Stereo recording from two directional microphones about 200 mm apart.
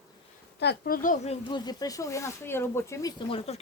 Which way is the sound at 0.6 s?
50° left (ahead or behind).